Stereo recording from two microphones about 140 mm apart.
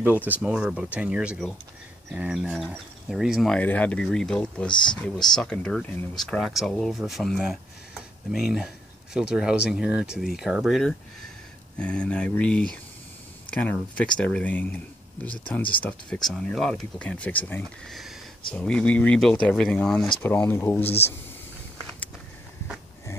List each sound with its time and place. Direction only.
0.0 s speech: 10° right (ahead or behind); by 17.6 s 10° left (ahead or behind)
17.8 s speech: centre (ahead or behind)